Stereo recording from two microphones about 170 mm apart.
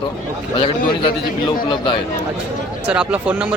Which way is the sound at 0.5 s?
30° left (ahead or behind).